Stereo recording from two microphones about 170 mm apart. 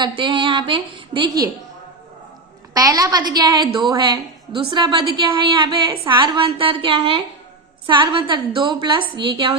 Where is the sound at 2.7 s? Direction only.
20° right (ahead or behind).